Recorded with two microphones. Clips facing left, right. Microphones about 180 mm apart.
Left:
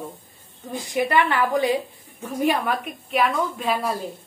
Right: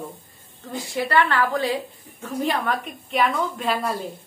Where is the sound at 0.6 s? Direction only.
15° left (ahead or behind); by 4.1 s centre (ahead or behind).